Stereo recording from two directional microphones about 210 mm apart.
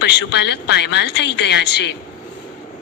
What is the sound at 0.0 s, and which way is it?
A woman's voice, 55° left (ahead or behind).